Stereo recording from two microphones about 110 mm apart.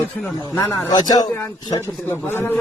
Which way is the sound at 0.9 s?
35° left (ahead or behind).